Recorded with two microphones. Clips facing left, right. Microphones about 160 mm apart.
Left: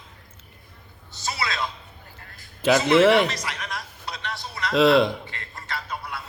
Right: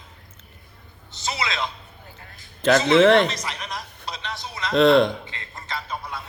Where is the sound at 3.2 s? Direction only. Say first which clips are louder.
Right 1 dB; 20° right (ahead or behind).